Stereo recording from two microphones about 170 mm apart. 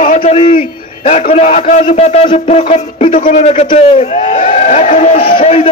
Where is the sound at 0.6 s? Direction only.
45° left (ahead or behind).